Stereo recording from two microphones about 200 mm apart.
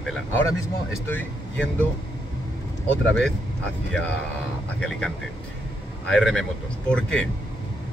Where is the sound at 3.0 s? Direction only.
5° left (ahead or behind).